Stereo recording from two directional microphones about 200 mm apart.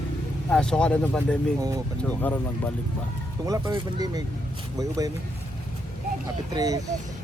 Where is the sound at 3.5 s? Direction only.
15° right (ahead or behind).